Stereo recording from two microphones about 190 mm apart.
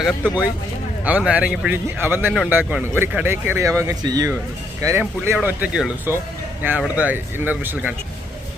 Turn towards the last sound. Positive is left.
turn(degrees=-10)  # may be behind; listen again after turning